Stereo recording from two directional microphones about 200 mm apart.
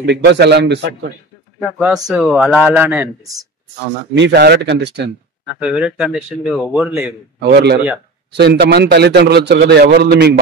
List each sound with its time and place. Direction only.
0.0 s a man's voice: 60° right (ahead or behind)
1.8 s speech: 5° right (ahead or behind)
4.1 s a man's voice: 60° right (ahead or behind)
5.6 s speech: 5° right (ahead or behind)
7.3 s a man's voice: 55° right (ahead or behind)